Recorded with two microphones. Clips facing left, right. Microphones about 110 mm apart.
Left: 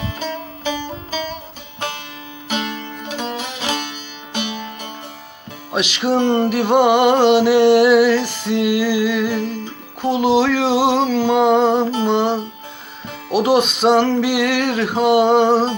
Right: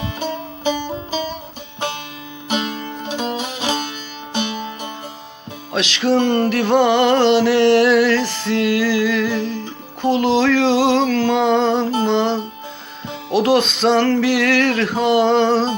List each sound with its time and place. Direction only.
0.0 s music: 20° right (ahead or behind)
2.5 s music: 30° right (ahead or behind)
5.7 s music: 15° left (ahead or behind)